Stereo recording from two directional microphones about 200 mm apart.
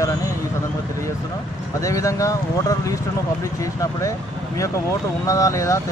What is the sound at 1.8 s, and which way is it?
Speech, 15° left (ahead or behind).